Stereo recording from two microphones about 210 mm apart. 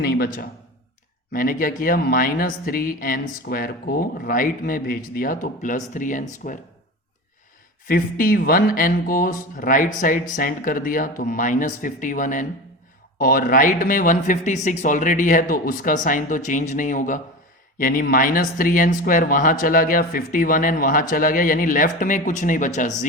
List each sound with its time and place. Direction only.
0.0 s speech: 50° left (ahead or behind)
7.9 s speech: 45° left (ahead or behind)